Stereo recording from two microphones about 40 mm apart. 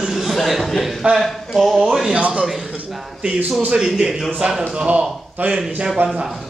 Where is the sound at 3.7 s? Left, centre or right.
Centre.